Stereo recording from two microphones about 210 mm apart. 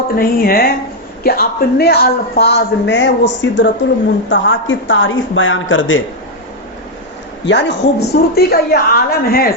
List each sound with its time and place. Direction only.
0.2 s a man's voice: 45° left (ahead or behind); by 6.0 s 65° left (ahead or behind)
7.4 s a man's voice: 55° left (ahead or behind)